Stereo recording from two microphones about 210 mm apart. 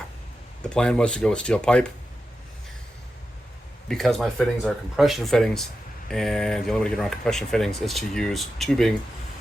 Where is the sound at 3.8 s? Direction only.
Centre (ahead or behind).